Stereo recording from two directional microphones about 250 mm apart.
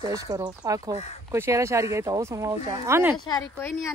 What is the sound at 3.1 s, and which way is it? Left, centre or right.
Speech, centre.